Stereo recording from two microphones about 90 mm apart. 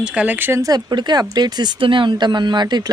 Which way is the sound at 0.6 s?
45° right (ahead or behind).